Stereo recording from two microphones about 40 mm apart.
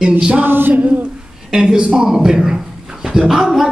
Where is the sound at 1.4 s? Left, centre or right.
Centre.